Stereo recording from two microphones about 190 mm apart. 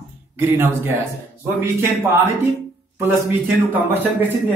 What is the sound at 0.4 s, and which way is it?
Speech, 10° right (ahead or behind).